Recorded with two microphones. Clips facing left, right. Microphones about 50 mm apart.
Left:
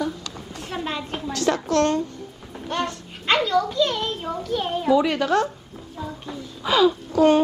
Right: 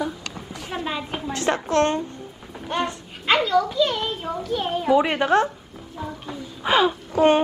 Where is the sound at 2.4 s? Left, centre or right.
Centre.